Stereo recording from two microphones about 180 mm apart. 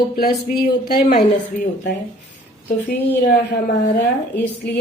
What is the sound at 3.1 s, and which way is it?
Speech, 65° left (ahead or behind).